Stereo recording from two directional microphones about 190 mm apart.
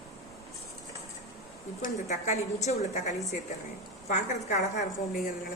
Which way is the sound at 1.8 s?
35° left (ahead or behind).